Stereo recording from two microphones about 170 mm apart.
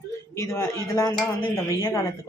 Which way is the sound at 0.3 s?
15° left (ahead or behind).